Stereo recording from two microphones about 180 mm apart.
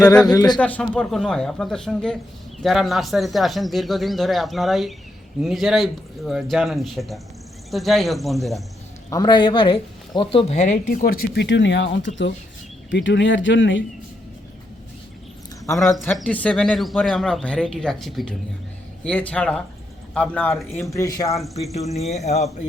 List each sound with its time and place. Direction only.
0.3 s speech: 20° left (ahead or behind)
0.6 s speech: 5° left (ahead or behind)
9.0 s speech: 20° left (ahead or behind)
10.5 s speech: 40° left (ahead or behind); by 13.8 s 90° left
16.1 s speech: 5° left (ahead or behind)
20.9 s speech: 20° left (ahead or behind)
21.7 s speech: 35° left (ahead or behind)